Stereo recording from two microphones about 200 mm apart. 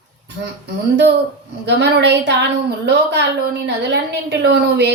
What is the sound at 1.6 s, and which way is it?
A woman's voice, 60° right (ahead or behind).